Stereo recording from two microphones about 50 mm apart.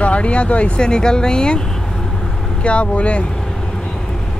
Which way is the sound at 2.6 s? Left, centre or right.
Left.